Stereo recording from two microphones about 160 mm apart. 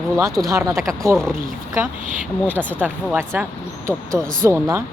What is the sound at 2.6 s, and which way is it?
Speech, 10° left (ahead or behind).